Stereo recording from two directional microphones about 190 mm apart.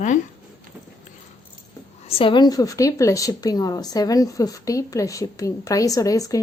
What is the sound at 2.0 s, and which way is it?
A woman's voice, 30° left (ahead or behind).